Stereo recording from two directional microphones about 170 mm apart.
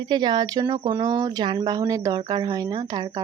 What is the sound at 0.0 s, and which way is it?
Speech, 25° right (ahead or behind).